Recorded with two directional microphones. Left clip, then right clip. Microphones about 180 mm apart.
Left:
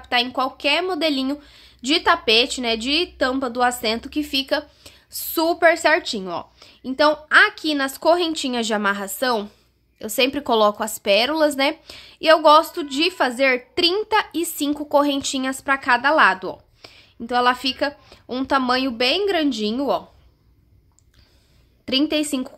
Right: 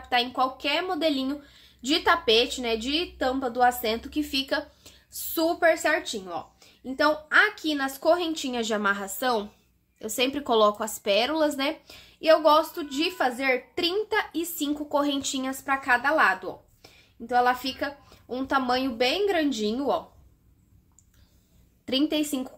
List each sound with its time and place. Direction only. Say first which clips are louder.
0.1 s a woman's voice: left 4 dB; 40° left (ahead or behind)
21.8 s a woman's voice: left 5 dB; 35° left (ahead or behind)